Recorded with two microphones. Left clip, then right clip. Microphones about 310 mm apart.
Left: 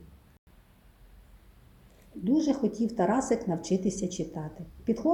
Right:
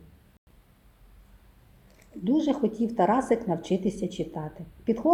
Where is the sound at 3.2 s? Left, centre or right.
Centre.